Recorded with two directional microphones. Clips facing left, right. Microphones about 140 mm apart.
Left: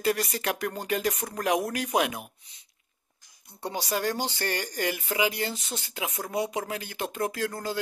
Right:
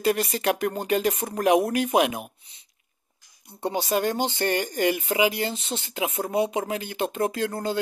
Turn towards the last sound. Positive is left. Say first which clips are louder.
# right 4 dB
turn(degrees=-25)  # may be behind; listen again after turning